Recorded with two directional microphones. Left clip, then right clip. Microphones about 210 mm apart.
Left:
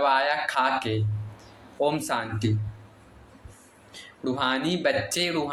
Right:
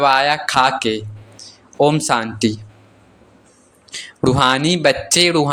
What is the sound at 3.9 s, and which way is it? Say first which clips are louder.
Speech: right 13 dB; 55° right (ahead or behind).